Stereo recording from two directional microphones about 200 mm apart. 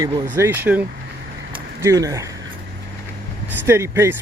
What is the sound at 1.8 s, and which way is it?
Speech, 15° right (ahead or behind).